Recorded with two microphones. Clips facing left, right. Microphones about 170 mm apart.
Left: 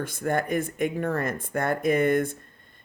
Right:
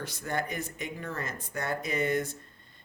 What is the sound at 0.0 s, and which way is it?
Speech, 50° left (ahead or behind).